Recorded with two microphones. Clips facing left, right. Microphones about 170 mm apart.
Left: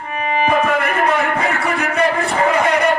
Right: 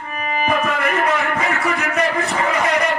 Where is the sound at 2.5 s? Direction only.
30° left (ahead or behind).